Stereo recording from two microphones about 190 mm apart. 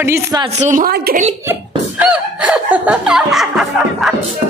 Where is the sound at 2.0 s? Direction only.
5° right (ahead or behind).